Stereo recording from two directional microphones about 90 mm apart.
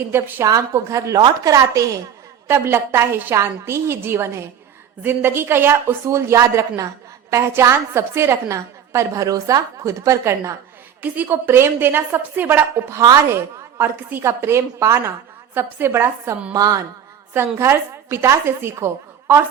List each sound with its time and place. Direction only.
0.4 s speech: 35° right (ahead or behind)
2.5 s a woman's voice: 25° right (ahead or behind)
11.0 s a woman's voice: 20° right (ahead or behind)
13.0 s speech: 40° right (ahead or behind)
13.2 s a woman's voice: 25° right (ahead or behind)
16.6 s speech: 45° right (ahead or behind)
17.3 s a woman's voice: 25° right (ahead or behind)